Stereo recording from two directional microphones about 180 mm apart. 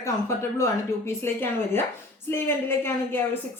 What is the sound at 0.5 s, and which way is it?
Speech, 15° left (ahead or behind).